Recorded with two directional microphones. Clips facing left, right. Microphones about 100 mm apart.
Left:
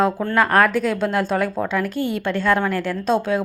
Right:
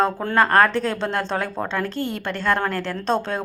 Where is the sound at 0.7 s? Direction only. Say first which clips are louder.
Left 3 dB; 5° left (ahead or behind).